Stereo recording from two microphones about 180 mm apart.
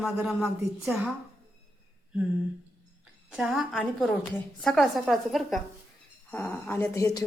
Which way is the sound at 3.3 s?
Centre (ahead or behind).